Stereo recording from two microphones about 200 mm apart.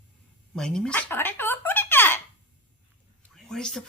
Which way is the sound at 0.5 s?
Centre (ahead or behind).